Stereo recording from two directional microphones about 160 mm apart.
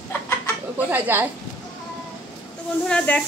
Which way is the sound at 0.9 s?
15° right (ahead or behind).